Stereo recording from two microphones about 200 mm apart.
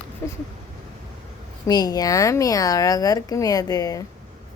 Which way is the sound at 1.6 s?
20° left (ahead or behind).